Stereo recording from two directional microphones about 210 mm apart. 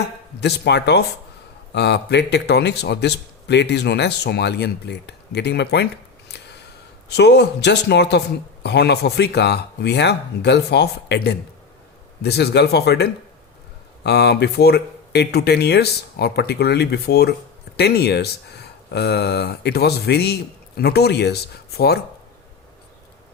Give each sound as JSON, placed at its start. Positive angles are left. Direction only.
{"t": 0.3, "sound": "speech", "side_deg": 50}
{"t": 6.3, "sound": "a sound", "side_deg": 55}
{"t": 7.1, "sound": "speech", "side_deg": 55}